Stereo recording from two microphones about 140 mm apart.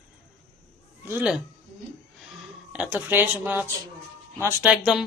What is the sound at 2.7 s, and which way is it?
Speech, 10° right (ahead or behind).